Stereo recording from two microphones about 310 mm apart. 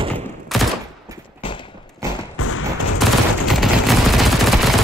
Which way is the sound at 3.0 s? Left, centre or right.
Centre.